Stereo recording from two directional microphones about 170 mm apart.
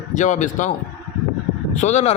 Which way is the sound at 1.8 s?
40° left (ahead or behind).